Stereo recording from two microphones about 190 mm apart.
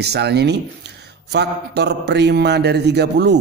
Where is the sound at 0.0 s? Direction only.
60° right (ahead or behind).